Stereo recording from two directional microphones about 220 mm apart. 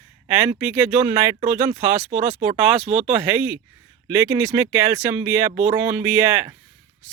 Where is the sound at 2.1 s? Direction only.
40° right (ahead or behind).